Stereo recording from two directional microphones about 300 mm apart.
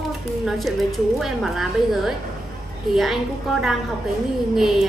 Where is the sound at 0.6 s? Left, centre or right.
Centre.